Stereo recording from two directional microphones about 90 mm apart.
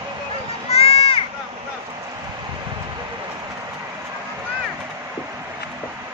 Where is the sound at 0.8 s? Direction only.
90° left.